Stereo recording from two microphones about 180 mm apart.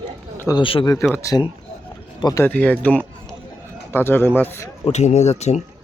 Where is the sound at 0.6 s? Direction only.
30° left (ahead or behind).